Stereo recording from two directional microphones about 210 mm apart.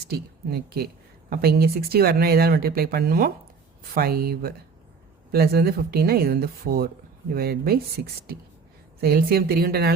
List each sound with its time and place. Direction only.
0.1 s speech: 50° right (ahead or behind)